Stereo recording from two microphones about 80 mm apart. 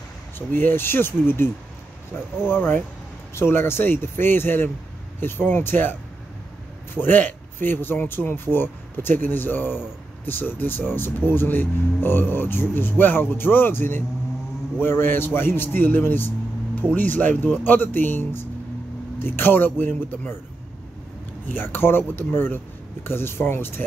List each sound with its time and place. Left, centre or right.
0.5 s speech: left
21.5 s speech: left